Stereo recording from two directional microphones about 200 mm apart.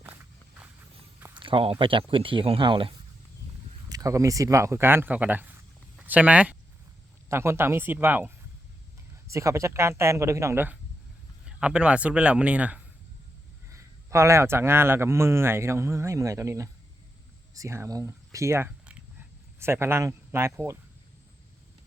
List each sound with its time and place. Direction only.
1.3 s a man's voice: 25° right (ahead or behind); by 8.3 s 10° right (ahead or behind)
9.3 s a man's voice: 15° right (ahead or behind)